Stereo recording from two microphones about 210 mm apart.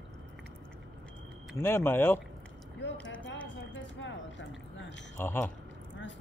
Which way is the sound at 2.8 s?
60° left (ahead or behind).